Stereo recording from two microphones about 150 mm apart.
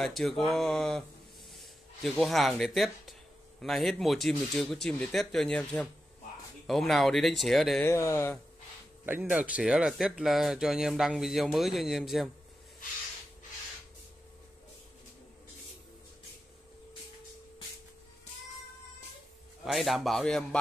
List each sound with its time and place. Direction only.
0.0 s speech: centre (ahead or behind)
7.8 s speech: 20° left (ahead or behind)
9.2 s speech: 10° right (ahead or behind)
19.6 s speech: centre (ahead or behind)